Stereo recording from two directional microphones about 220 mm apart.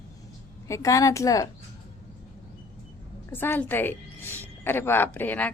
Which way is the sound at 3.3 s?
10° left (ahead or behind).